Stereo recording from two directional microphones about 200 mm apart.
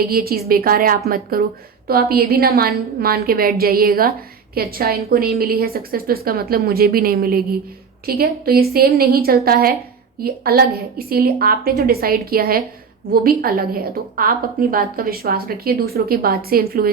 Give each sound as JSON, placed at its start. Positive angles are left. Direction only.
{"t": 0.1, "sound": "a woman's voice", "side_deg": -50}